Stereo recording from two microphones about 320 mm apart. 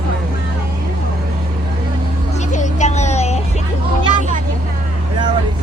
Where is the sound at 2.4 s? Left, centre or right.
Left.